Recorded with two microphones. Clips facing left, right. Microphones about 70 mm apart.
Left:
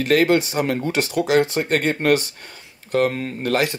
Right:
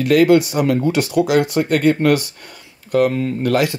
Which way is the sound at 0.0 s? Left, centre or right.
Left.